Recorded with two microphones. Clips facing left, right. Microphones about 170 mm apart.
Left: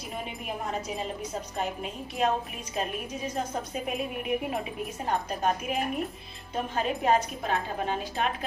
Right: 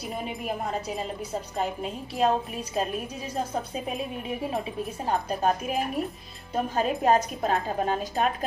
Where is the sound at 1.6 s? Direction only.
35° right (ahead or behind).